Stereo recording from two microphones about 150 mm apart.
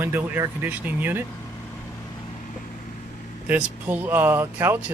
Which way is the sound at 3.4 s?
10° right (ahead or behind).